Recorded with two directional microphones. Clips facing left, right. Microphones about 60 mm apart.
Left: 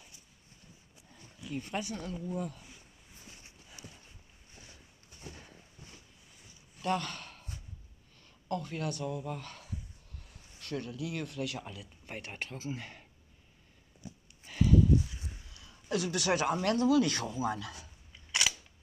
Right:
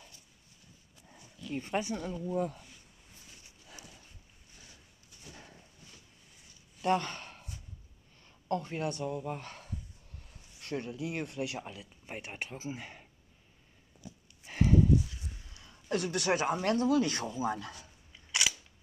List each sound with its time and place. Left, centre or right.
1.5 s speech: right
2.3 s speech: right
6.8 s a sound: right
8.2 s speech: right
14.5 s horse: right
15.5 s a sound: right
16.6 s speech: right
18.1 s camera: centre